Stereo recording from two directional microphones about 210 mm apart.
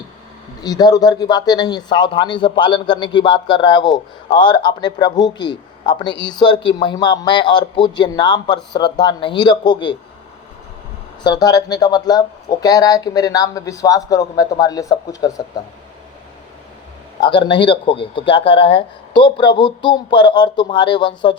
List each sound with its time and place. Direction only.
0.6 s speech: 20° left (ahead or behind)
11.2 s speech: 20° left (ahead or behind)
17.2 s speech: 20° left (ahead or behind)